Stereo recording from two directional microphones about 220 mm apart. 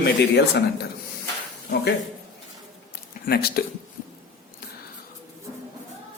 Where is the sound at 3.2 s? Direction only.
45° left (ahead or behind).